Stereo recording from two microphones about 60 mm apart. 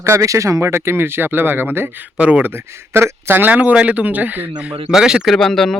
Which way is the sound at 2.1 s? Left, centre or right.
Right.